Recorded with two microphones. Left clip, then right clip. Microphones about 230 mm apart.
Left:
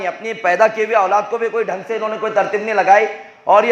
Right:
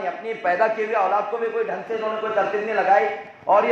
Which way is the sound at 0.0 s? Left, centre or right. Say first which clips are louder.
Left 5 dB; left.